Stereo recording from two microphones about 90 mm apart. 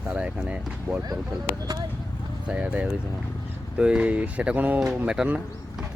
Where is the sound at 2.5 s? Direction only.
15° right (ahead or behind).